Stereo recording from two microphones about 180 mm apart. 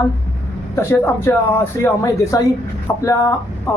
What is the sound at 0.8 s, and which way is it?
Speech, 15° left (ahead or behind).